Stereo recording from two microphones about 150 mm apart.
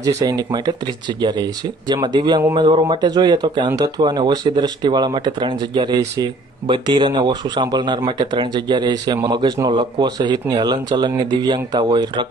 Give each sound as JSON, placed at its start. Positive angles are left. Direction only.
{"t": 0.2, "sound": "speech", "side_deg": -25}